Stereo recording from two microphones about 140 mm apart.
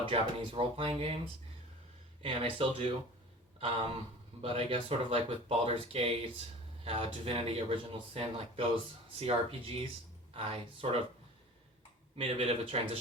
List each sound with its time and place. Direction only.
0.0 s speech: 40° right (ahead or behind)
2.2 s speech: 40° right (ahead or behind)
12.1 s speech: 45° right (ahead or behind)